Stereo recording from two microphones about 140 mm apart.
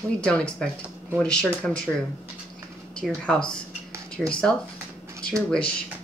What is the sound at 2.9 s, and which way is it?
Speech, 5° left (ahead or behind).